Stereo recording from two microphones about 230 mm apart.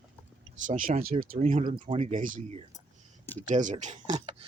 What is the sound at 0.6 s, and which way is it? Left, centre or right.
Speech, right.